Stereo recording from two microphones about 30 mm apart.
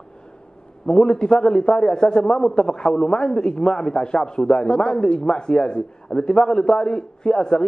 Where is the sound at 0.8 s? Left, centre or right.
Left.